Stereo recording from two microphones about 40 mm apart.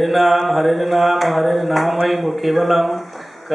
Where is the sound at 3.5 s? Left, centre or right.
Centre.